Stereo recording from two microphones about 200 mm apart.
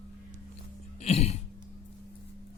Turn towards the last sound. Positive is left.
turn(degrees=30)  # may be behind; listen again after turning